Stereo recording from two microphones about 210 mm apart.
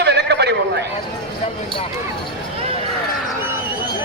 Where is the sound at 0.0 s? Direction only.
50° right (ahead or behind).